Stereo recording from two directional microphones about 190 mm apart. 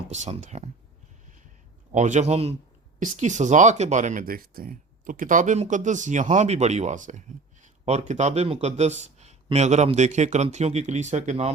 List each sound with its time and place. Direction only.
0.1 s speech: 35° right (ahead or behind)
1.9 s speech: 40° right (ahead or behind)